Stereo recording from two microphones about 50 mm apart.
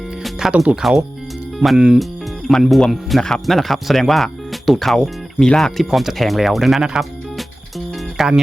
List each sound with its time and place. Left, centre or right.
0.2 s music: centre
0.8 s speech: centre